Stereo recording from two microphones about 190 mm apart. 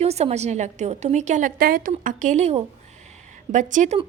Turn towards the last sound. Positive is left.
turn(degrees=-40)  # may be behind; listen again after turning